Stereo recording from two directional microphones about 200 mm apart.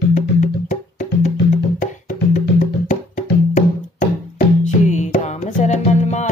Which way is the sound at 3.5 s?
40° left (ahead or behind).